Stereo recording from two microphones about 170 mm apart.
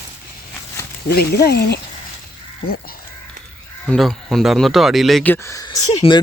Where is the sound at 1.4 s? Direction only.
70° left (ahead or behind).